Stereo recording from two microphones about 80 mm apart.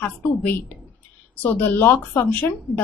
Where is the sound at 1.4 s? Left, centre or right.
Left.